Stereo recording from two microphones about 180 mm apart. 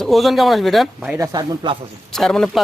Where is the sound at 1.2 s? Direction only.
25° right (ahead or behind).